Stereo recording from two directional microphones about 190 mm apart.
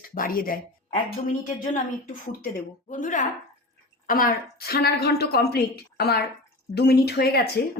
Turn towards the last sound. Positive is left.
turn(degrees=55)  # may be behind; listen again after turning